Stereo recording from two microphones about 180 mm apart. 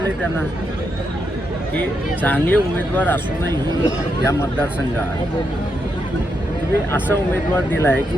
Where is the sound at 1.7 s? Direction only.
10° left (ahead or behind).